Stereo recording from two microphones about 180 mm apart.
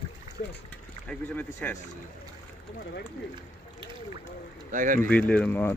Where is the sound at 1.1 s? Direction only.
10° left (ahead or behind).